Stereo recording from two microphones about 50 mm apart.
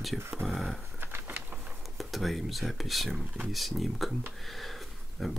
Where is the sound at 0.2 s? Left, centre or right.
Right.